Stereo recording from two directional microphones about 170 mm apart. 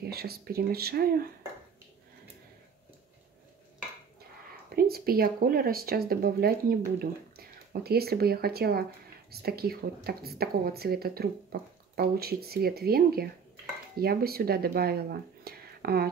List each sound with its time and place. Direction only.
0.0 s speech: 65° right (ahead or behind)
4.7 s speech: 60° right (ahead or behind)